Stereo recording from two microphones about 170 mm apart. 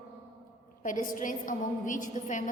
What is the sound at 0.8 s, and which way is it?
A woman's voice, 50° left (ahead or behind).